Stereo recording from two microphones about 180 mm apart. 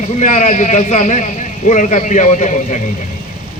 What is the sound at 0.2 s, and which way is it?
A man's voice, 40° left (ahead or behind).